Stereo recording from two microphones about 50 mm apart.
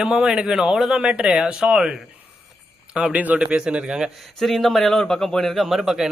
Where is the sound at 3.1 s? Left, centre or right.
Right.